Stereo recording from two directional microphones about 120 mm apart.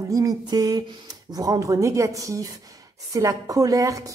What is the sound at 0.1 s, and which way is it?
A woman's voice, 30° right (ahead or behind).